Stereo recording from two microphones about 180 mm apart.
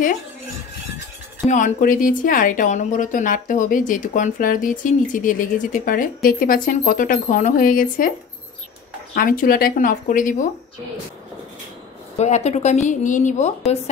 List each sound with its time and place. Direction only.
1.5 s a woman's voice: 45° left (ahead or behind)
9.1 s a woman's voice: 50° left (ahead or behind)
12.2 s a woman's voice: 40° left (ahead or behind)